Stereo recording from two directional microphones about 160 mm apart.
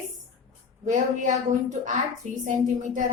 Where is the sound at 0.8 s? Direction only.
50° right (ahead or behind).